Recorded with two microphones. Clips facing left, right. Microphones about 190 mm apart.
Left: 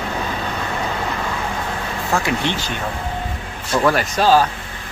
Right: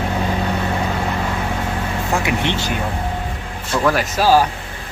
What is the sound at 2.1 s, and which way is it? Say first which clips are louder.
Speech: even; 20° right (ahead or behind).